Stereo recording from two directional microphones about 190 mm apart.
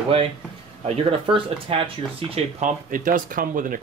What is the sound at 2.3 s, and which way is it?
Speech, 40° right (ahead or behind).